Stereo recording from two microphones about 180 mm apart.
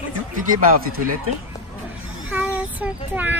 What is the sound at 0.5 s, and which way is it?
Speech, 50° right (ahead or behind).